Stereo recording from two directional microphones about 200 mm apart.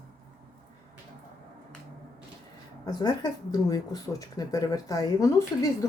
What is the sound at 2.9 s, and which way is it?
Speech, 20° left (ahead or behind).